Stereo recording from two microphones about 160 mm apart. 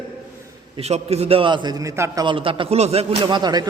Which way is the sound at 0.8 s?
40° right (ahead or behind).